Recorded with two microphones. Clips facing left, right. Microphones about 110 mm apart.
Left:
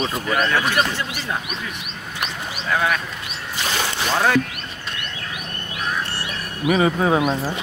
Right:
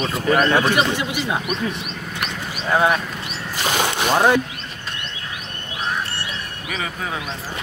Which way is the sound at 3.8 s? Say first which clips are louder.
Right 4 dB; 15° right (ahead or behind).